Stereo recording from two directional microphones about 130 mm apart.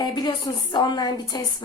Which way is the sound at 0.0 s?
35° left (ahead or behind).